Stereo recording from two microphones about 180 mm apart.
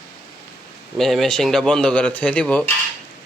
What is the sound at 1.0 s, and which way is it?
Speech, centre (ahead or behind).